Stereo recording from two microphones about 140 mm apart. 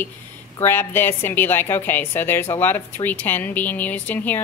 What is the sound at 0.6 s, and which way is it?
A woman's voice, 15° left (ahead or behind).